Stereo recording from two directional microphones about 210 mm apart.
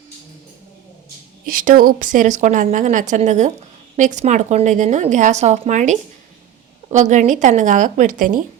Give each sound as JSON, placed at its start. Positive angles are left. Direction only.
{"t": 1.6, "sound": "a woman's voice", "side_deg": -40}